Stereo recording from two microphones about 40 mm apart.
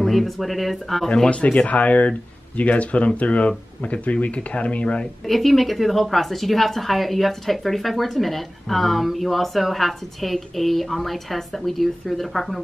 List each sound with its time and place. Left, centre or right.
0.0 s a woman's voice: centre
1.0 s speech: left
5.2 s a woman's voice: centre